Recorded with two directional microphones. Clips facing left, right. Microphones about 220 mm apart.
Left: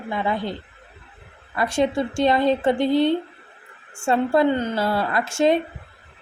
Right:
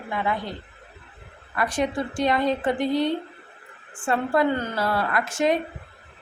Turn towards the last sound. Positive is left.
turn(degrees=25)  # may be behind; listen again after turning